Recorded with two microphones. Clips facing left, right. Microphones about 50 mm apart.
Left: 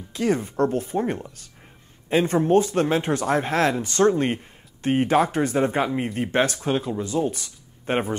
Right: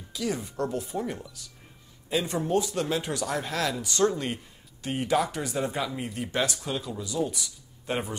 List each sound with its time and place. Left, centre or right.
0.1 s speech: left